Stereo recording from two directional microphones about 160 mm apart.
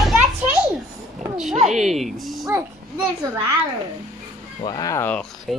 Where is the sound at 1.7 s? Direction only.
Centre (ahead or behind).